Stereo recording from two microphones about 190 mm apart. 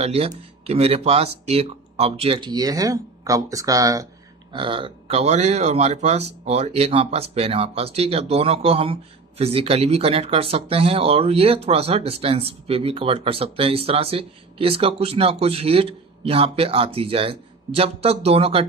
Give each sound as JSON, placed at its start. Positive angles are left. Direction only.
{"t": 0.0, "sound": "speech", "side_deg": -30}